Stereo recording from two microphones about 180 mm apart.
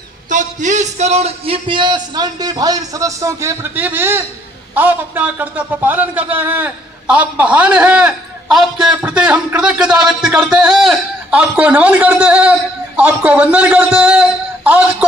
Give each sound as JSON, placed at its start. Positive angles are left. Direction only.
{"t": 0.3, "sound": "a man's voice", "side_deg": -45}